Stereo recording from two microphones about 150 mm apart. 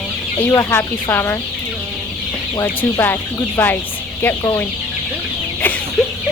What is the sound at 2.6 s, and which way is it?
Speech, 15° left (ahead or behind).